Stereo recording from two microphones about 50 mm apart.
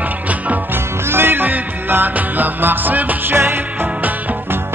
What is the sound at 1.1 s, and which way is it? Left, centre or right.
Music, right.